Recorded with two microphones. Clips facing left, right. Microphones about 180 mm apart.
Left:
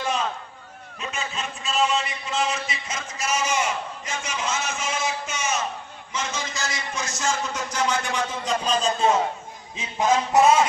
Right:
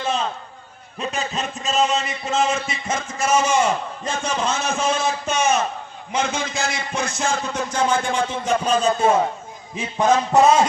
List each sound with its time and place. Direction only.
0.0 s a sound: 25° right (ahead or behind)
0.9 s a man's voice: 35° right (ahead or behind); by 10.2 s 55° right (ahead or behind)
10.3 s speech: 30° right (ahead or behind)